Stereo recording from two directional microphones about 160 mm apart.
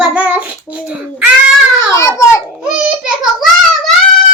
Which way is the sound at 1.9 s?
20° left (ahead or behind).